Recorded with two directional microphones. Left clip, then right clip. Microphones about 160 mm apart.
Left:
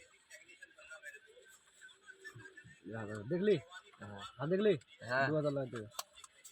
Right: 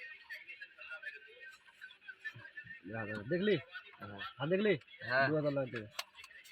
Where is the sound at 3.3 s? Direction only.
25° right (ahead or behind).